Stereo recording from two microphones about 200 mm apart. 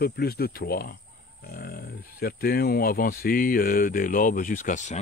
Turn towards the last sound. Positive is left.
turn(degrees=35)  # may be behind; listen again after turning